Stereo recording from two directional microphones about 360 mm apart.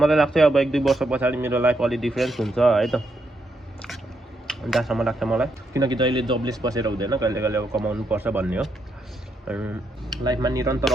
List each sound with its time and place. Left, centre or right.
0.0 s speech: centre
4.4 s speech: centre